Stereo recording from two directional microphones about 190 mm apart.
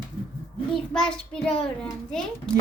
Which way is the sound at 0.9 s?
5° left (ahead or behind).